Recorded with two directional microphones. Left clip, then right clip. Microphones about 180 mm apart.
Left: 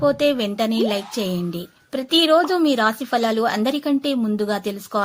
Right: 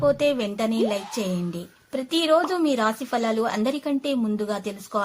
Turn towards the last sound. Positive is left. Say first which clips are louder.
# left 5 dB
turn(degrees=30)  # may be behind; listen again after turning